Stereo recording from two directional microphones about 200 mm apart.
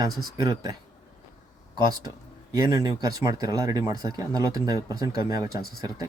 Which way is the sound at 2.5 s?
20° right (ahead or behind).